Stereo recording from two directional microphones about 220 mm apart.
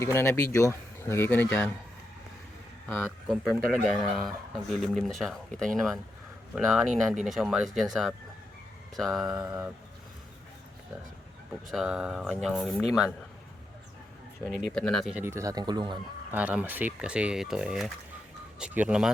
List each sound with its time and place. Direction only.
0.0 s speech: 10° left (ahead or behind)
2.9 s speech: centre (ahead or behind)
9.3 s speech: 15° right (ahead or behind)
11.7 s speech: 5° right (ahead or behind)
14.6 s speech: centre (ahead or behind); by 16.0 s 20° right (ahead or behind)
16.3 s speech: 5° right (ahead or behind)